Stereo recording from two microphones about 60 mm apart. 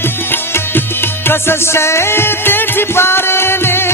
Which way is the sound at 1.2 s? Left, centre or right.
Left.